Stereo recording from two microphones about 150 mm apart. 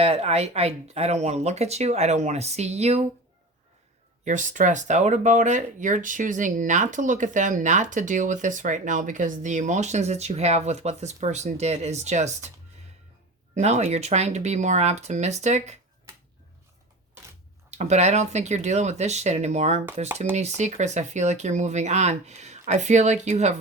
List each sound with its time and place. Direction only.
0.0 s speech: 45° right (ahead or behind)
4.3 s speech: 55° right (ahead or behind)
13.6 s speech: 50° right (ahead or behind)
17.7 s speech: 50° right (ahead or behind)